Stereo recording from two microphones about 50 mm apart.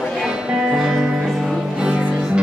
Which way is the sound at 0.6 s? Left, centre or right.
Centre.